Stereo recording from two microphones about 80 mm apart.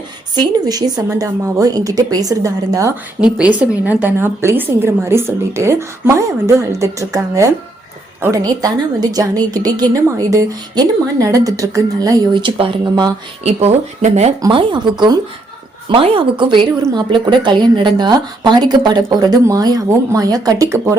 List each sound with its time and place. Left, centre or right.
0.3 s a woman's voice: right
3.2 s speech: centre
4.0 s a woman's voice: right
8.4 s a woman's voice: right
9.9 s a woman's voice: right
12.3 s speech: right
14.5 s speech: right
15.9 s a woman's voice: right